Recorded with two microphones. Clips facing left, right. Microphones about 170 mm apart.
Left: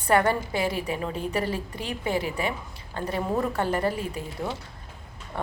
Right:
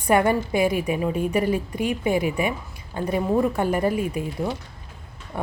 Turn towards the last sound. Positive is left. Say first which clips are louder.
# right 2 dB
turn(degrees=-15)  # may be behind; listen again after turning